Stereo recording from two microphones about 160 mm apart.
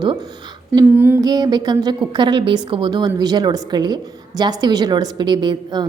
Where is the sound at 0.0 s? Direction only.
30° right (ahead or behind).